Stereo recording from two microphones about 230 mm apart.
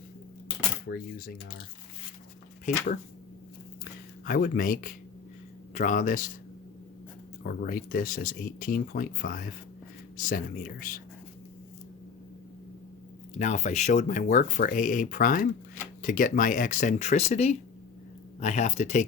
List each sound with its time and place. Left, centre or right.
0.9 s speech: left
2.6 s speech: left
4.3 s speech: left
7.4 s speech: left
13.4 s speech: left